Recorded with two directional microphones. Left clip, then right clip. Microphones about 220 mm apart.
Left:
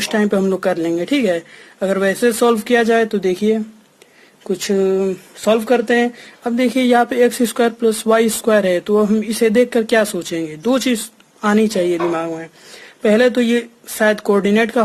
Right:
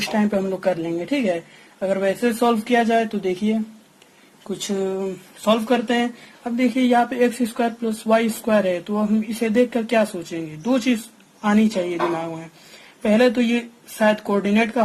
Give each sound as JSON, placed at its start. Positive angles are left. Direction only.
{"t": 0.1, "sound": "speech", "side_deg": 45}